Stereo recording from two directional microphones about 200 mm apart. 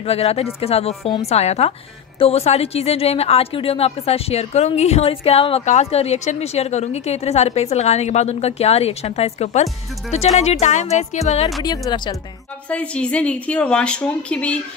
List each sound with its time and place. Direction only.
0.0 s speech: 30° left (ahead or behind)
11.6 s speech: 20° left (ahead or behind)
12.6 s a woman's voice: 5° left (ahead or behind)